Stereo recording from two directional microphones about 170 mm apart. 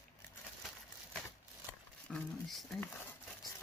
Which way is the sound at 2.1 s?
5° left (ahead or behind).